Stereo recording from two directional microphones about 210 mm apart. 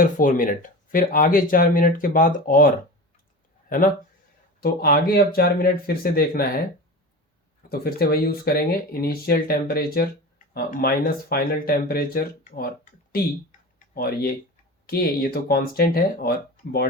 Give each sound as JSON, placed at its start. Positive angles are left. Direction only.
{"t": 0.0, "sound": "speech", "side_deg": 40}
{"t": 4.6, "sound": "speech", "side_deg": 45}
{"t": 7.7, "sound": "speech", "side_deg": 45}
{"t": 13.7, "sound": "tick-tock", "side_deg": 45}
{"t": 14.8, "sound": "speech", "side_deg": 45}